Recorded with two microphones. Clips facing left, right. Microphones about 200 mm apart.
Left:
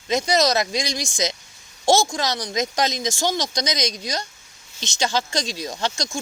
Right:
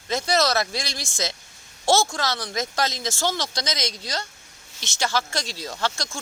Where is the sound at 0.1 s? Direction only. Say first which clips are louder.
Left 3 dB; 15° left (ahead or behind).